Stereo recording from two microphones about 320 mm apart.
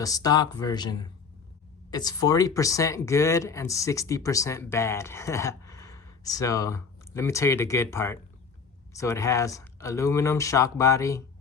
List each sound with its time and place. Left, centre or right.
0.0 s speech: centre